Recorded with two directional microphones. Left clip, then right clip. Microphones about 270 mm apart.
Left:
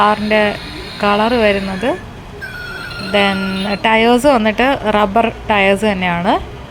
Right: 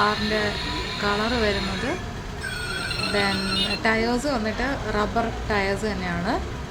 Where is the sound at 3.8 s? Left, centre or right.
Left.